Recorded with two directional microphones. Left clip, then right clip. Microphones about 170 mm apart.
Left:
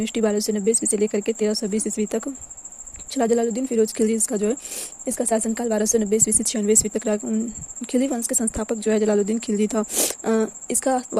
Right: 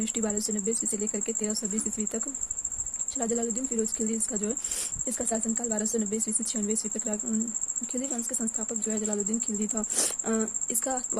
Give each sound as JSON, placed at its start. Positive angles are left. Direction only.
{"t": 0.0, "sound": "speech", "side_deg": 35}